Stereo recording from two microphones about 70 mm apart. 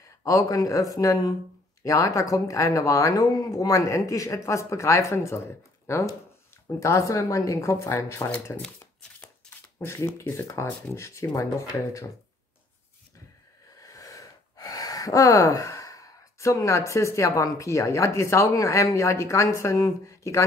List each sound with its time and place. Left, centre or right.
0.2 s speech: left
9.5 s a sound: centre
9.8 s speech: left
13.7 s speech: left